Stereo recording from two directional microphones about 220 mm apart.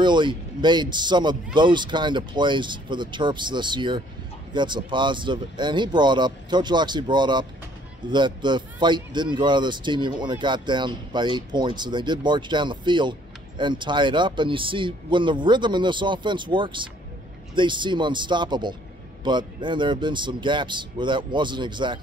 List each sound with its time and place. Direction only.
0.0 s speech: 20° right (ahead or behind)